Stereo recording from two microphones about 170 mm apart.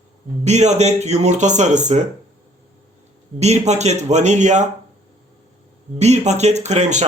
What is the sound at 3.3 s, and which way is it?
Speech, 40° right (ahead or behind).